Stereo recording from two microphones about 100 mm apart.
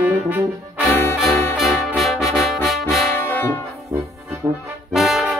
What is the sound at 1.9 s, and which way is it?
Brass instrument, centre (ahead or behind).